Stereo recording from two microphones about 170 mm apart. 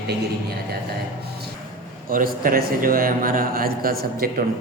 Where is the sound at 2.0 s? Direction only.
55° right (ahead or behind).